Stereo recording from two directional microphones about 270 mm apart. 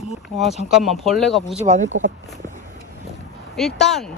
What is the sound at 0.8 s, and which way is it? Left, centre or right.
Speech, centre.